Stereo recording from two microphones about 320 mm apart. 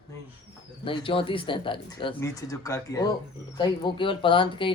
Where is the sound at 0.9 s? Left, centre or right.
Centre.